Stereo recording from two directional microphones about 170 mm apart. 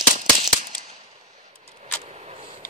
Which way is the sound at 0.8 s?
40° right (ahead or behind).